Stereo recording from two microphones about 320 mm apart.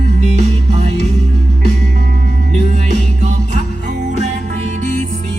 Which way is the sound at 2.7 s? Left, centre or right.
Right.